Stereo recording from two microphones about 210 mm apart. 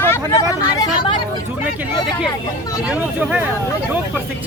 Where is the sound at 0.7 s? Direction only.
20° left (ahead or behind).